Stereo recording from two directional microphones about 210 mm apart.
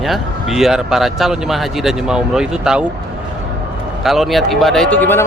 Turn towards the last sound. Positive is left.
turn(degrees=10)  # may be behind; listen again after turning